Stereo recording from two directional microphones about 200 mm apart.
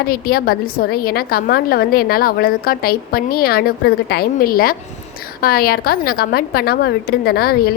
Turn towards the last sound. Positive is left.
turn(degrees=50)  # may be behind; listen again after turning